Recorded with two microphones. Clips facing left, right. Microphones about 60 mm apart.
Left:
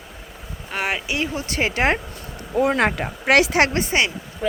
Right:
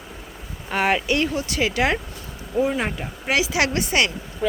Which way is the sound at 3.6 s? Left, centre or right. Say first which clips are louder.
Left 3 dB; left.